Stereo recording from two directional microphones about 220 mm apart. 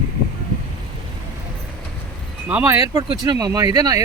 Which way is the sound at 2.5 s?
10° right (ahead or behind).